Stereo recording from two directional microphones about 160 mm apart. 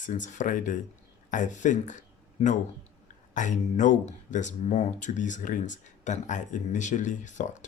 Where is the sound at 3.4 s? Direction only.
50° left (ahead or behind).